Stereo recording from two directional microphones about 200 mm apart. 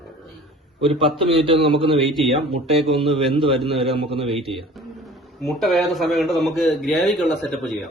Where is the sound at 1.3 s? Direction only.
30° right (ahead or behind).